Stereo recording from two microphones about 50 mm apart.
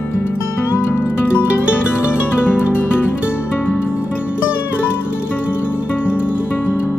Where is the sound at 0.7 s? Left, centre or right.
Left.